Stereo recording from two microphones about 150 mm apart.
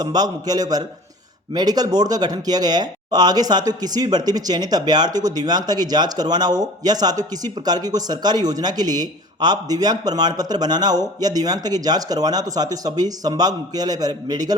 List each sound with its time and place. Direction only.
0.0 s speech: 25° right (ahead or behind)